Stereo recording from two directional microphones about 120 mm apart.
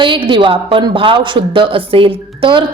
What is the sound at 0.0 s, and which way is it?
A woman's voice, 45° right (ahead or behind).